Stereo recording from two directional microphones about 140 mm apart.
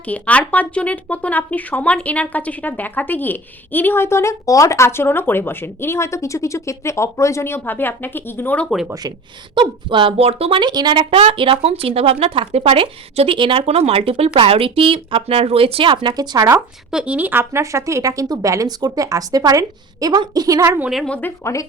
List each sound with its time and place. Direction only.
0.0 s speech: 10° left (ahead or behind)
8.9 s speech: 30° right (ahead or behind)
16.9 s speech: 5° right (ahead or behind)
20.9 s speech: 5° left (ahead or behind)
21.2 s speech: 15° left (ahead or behind)